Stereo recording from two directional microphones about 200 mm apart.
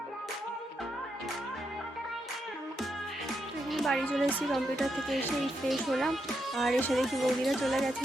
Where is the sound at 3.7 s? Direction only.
Centre (ahead or behind).